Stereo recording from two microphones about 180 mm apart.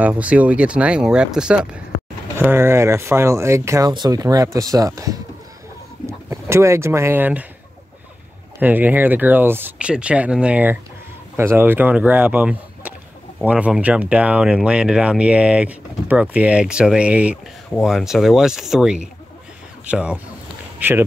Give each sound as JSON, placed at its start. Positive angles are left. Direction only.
{"t": 0.0, "sound": "speech", "side_deg": -10}
{"t": 8.5, "sound": "speech", "side_deg": -10}